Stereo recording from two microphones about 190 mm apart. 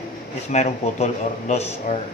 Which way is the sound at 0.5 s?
35° left (ahead or behind).